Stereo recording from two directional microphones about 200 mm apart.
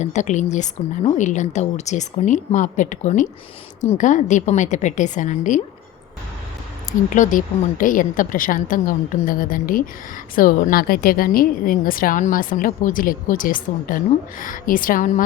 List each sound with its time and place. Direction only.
0.0 s a woman's voice: 35° left (ahead or behind)
7.1 s a woman's voice: 40° left (ahead or behind)